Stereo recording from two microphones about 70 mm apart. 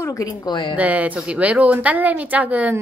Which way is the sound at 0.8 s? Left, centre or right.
Right.